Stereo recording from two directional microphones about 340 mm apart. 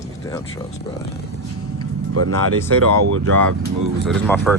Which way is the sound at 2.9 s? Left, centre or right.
Right.